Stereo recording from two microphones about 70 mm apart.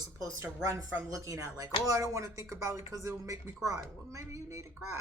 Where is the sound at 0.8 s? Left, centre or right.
Right.